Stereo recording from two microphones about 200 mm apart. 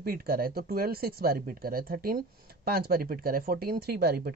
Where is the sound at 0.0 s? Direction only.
50° right (ahead or behind).